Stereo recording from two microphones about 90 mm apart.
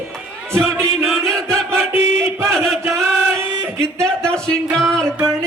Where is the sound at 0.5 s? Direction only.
30° right (ahead or behind).